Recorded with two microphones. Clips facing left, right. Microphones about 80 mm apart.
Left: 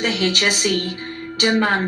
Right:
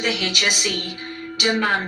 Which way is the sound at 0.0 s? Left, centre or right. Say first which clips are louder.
Left 3 dB; left.